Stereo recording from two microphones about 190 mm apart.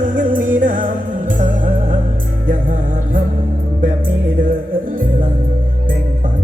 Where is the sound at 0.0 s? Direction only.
45° right (ahead or behind).